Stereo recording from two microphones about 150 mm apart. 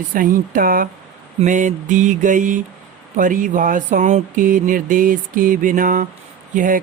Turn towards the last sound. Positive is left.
turn(degrees=-60)  # may be behind; listen again after turning